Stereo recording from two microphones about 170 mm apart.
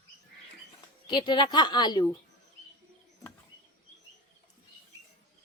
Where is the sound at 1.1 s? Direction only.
30° left (ahead or behind).